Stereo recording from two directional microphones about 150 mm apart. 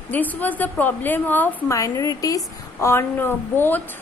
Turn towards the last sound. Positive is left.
turn(degrees=15)  # may be behind; listen again after turning